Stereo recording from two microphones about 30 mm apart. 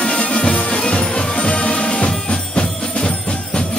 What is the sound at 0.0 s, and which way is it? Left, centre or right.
Music, left.